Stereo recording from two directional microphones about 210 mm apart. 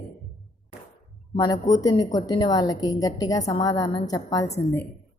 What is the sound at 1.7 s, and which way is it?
A woman's voice, 15° left (ahead or behind).